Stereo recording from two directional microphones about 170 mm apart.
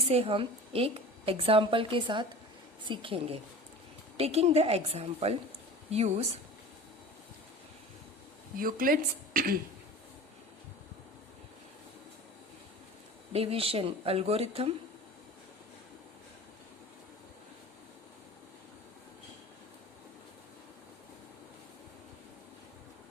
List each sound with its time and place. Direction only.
0.1 s a woman's voice: 35° right (ahead or behind)
8.5 s a woman's voice: 55° right (ahead or behind)
13.3 s a woman's voice: 35° right (ahead or behind)